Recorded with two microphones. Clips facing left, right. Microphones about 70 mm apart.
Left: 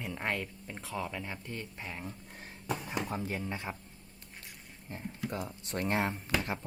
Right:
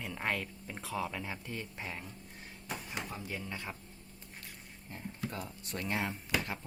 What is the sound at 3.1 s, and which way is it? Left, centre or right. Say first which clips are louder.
Speech: left 5 dB; left.